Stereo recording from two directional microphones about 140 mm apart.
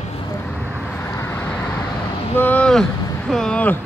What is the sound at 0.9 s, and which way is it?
Vehicle, 20° left (ahead or behind).